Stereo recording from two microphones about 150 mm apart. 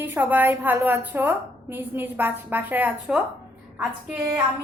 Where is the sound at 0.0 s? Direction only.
15° right (ahead or behind).